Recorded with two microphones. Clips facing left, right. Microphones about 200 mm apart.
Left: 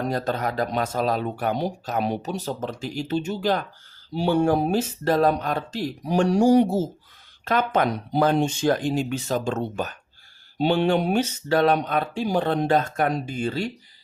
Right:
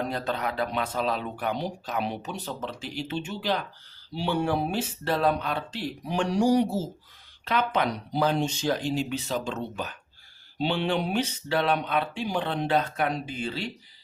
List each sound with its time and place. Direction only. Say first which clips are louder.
0.0 s speech: left 4 dB; 45° left (ahead or behind)